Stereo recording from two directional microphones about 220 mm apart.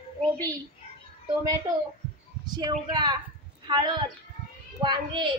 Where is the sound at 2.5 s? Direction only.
20° right (ahead or behind).